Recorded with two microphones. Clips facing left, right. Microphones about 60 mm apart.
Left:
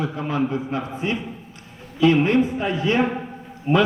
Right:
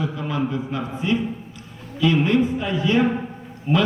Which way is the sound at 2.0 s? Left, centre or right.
Left.